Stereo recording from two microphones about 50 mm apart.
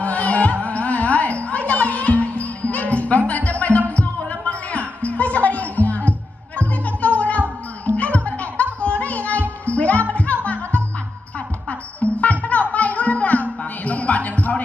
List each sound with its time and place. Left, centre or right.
0.0 s music: left